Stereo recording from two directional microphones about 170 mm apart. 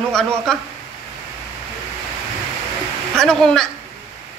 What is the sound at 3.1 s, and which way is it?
Speech, 5° left (ahead or behind).